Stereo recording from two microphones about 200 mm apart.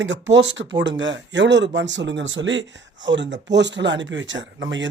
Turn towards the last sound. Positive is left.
turn(degrees=-65)  # may be behind; listen again after turning